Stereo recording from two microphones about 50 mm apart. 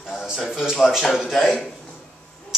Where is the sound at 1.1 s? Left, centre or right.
Centre.